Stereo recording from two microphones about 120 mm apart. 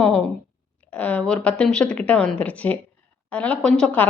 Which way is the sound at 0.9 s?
10° left (ahead or behind).